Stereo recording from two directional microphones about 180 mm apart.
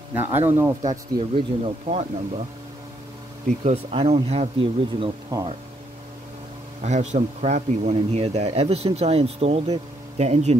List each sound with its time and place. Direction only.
0.1 s speech: 10° right (ahead or behind)
1.3 s a man's voice: 35° right (ahead or behind)
3.6 s a man's voice: 35° right (ahead or behind)
6.8 s a man's voice: 40° right (ahead or behind)